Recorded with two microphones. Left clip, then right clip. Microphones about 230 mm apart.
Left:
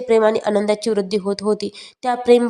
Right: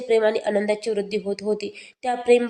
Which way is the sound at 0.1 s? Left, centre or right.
Left.